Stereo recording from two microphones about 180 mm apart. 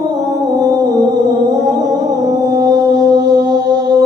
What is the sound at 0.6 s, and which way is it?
Music, 20° right (ahead or behind).